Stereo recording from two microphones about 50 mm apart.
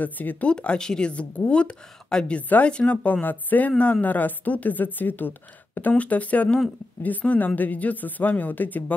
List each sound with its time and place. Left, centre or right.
0.0 s speech: left
0.5 s speech: left
3.7 s speech: left